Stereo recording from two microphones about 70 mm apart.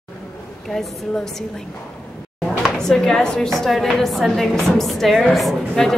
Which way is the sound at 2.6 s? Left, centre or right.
Centre.